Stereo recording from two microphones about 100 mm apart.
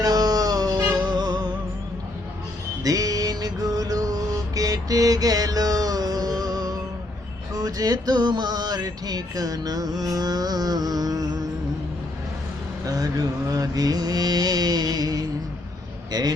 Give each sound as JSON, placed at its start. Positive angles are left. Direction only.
{"t": 0.0, "sound": "music", "side_deg": -40}
{"t": 2.8, "sound": "music", "side_deg": -35}
{"t": 12.8, "sound": "music", "side_deg": -40}